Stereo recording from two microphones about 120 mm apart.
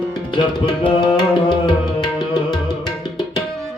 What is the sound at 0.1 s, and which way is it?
Tabla, 40° left (ahead or behind).